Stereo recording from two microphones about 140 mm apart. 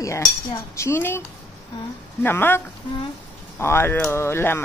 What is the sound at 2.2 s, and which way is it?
Speech, 15° left (ahead or behind).